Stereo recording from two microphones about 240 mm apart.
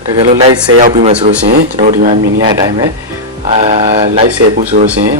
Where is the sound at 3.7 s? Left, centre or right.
Right.